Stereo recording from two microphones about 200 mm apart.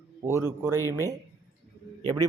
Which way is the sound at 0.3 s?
15° right (ahead or behind).